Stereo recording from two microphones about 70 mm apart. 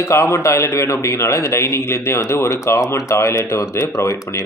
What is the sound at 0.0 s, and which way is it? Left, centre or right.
Speech, left.